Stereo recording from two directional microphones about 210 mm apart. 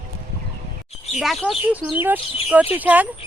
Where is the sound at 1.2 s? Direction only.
Centre (ahead or behind).